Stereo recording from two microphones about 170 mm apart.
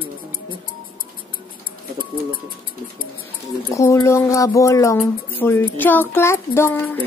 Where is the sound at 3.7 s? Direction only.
15° left (ahead or behind).